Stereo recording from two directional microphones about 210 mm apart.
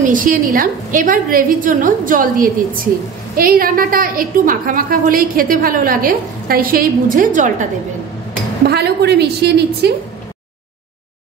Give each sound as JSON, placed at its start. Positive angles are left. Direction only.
{"t": 0.0, "sound": "a woman's voice", "side_deg": -40}
{"t": 8.6, "sound": "a woman's voice", "side_deg": -50}